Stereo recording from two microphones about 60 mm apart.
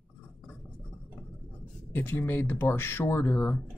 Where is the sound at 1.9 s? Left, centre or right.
Left.